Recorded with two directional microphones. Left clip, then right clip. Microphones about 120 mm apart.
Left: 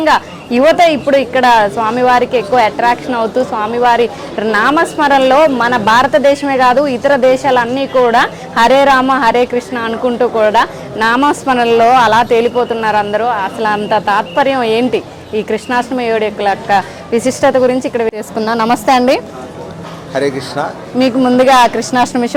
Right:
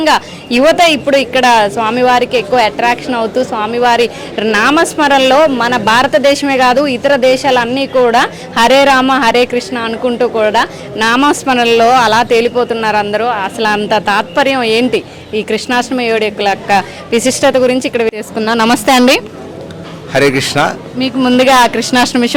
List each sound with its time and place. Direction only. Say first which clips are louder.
0.0 s a woman's voice: even; 15° right (ahead or behind)
18.6 s a woman's voice: right 1 dB; 20° right (ahead or behind)
21.2 s a woman's voice: right 1 dB; 10° right (ahead or behind)